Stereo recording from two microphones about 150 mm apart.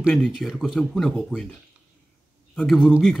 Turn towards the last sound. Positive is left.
turn(degrees=0)  # may be behind; listen again after turning